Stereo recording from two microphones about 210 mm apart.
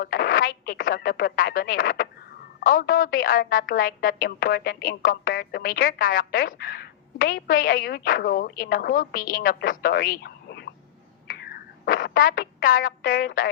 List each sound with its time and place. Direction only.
0.0 s a woman's voice: 45° left (ahead or behind)
11.3 s radio: 45° left (ahead or behind)